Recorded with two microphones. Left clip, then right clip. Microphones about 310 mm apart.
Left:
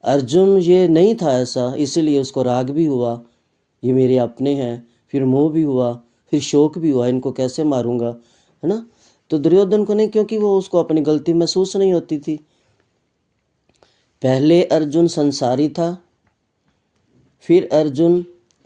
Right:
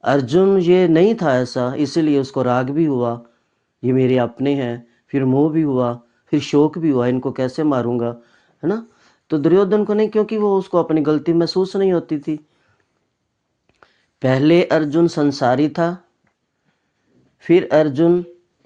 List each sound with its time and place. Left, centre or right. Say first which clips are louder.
0.0 s speech: left 1 dB; centre
13.7 s speech: right 3 dB; centre
17.4 s speech: even; centre